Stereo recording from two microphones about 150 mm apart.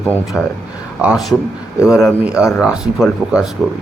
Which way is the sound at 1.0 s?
5° right (ahead or behind).